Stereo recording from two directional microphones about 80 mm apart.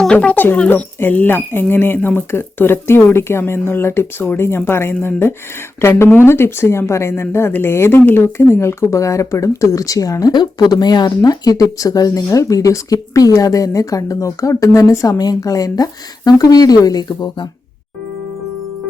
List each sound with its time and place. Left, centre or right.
0.0 s speech: centre; by 4.9 s left
6.0 s speech: left
10.3 s speech: left